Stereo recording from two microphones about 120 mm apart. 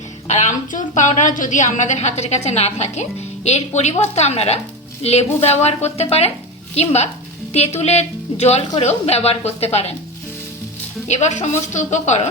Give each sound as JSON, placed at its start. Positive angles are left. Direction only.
{"t": 0.3, "sound": "a woman's voice", "side_deg": 75}
{"t": 11.1, "sound": "speech", "side_deg": 75}